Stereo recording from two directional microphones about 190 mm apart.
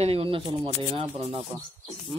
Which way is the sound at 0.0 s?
30° right (ahead or behind).